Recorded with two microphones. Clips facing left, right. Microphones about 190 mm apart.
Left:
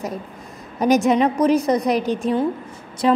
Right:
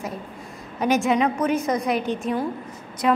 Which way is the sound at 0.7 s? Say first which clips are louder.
Left 4 dB; 40° left (ahead or behind).